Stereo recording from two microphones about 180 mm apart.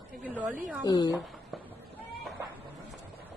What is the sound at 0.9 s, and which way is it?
Speech, 25° left (ahead or behind).